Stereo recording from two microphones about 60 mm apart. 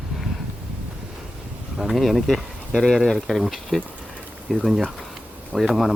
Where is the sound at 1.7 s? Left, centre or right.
Centre.